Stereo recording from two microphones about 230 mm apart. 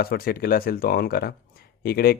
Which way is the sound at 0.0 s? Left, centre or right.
Left.